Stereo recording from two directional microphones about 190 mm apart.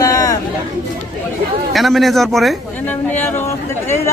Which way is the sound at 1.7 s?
Centre (ahead or behind).